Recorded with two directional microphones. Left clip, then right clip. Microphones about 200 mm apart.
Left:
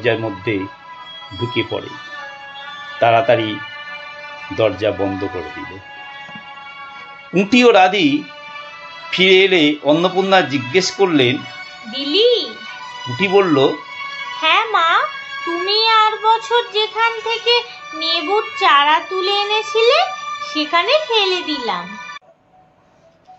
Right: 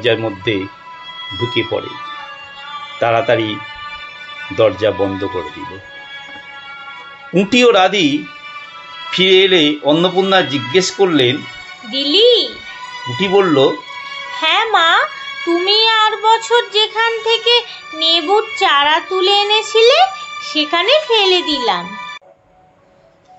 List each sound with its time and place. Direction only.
0.0 s speech: 5° right (ahead or behind)
3.0 s speech: 5° right (ahead or behind)
4.6 s speech: 5° right (ahead or behind)
7.3 s speech: 5° right (ahead or behind)
11.9 s music: 35° right (ahead or behind)
13.1 s speech: centre (ahead or behind)
14.4 s child singing: 35° right (ahead or behind)